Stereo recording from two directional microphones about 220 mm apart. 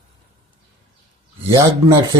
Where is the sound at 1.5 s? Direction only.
20° right (ahead or behind).